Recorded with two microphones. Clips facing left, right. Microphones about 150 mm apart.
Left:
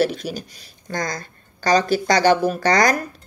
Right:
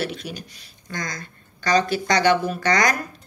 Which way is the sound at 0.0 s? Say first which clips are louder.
Left 8 dB; 40° left (ahead or behind).